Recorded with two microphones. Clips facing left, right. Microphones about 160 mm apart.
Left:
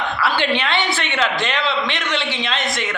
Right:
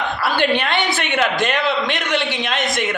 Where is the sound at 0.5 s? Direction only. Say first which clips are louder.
Right 1 dB; 50° right (ahead or behind).